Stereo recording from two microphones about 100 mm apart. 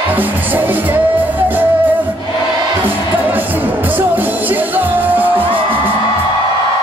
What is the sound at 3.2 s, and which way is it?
Music, 15° right (ahead or behind).